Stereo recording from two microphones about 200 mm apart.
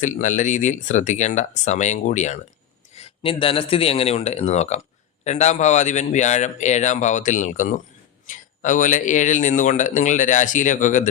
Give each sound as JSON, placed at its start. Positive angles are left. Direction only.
{"t": 0.0, "sound": "speech", "side_deg": 40}